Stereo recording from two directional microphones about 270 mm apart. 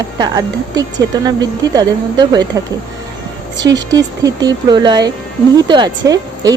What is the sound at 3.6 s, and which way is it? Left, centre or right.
Speech, centre.